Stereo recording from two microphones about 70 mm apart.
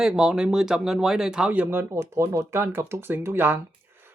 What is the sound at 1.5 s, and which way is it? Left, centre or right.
Speech, right.